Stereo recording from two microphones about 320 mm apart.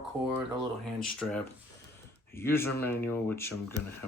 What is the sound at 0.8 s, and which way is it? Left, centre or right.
Speech, centre.